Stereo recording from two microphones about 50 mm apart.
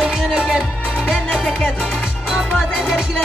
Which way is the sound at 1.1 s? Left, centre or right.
Centre.